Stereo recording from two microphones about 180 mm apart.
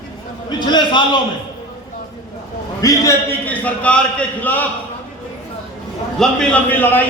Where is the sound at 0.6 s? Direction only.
25° left (ahead or behind).